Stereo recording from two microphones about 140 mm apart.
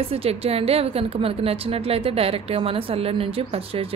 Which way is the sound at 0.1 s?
45° right (ahead or behind).